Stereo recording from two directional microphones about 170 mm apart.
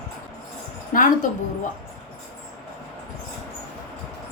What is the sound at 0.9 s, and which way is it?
Speech, 50° left (ahead or behind).